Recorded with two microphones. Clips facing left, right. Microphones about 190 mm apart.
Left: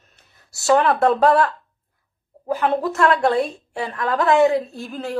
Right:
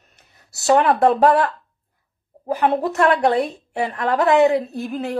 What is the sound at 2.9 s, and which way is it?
A woman's voice, 20° right (ahead or behind).